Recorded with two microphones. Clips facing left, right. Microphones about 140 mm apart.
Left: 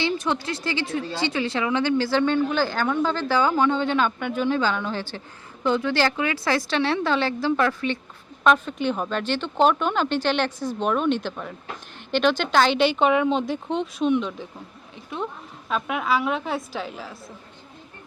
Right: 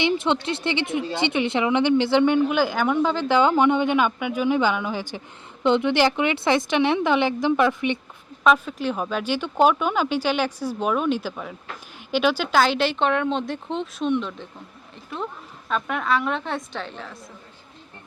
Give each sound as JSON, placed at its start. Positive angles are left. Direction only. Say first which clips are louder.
{"t": 0.0, "sound": "a woman's voice", "louder": "right 3 dB", "side_deg": -25}
{"t": 8.4, "sound": "a woman's voice", "louder": "even", "side_deg": -5}